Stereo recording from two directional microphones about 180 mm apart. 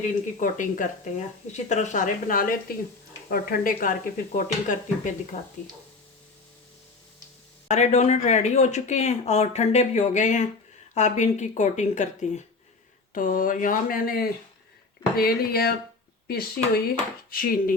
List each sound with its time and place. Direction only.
0.3 s speech: 45° left (ahead or behind)
7.7 s speech: 40° left (ahead or behind)